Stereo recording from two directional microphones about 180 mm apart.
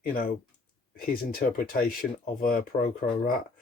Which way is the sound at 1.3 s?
55° left (ahead or behind).